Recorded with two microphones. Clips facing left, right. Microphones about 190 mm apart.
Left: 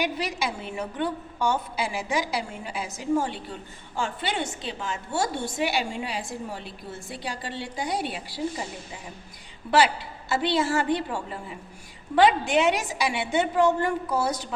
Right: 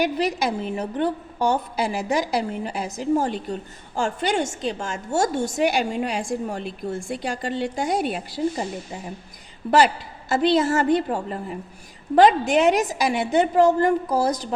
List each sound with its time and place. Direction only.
0.2 s a woman's voice: 40° right (ahead or behind)
9.7 s a woman's voice: 40° right (ahead or behind)